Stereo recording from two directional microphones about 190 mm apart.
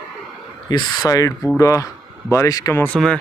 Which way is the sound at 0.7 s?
25° left (ahead or behind).